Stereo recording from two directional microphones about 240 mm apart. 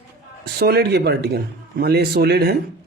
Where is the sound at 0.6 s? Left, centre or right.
Right.